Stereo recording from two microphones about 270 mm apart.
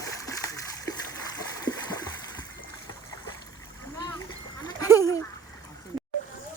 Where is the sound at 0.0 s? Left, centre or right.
Centre.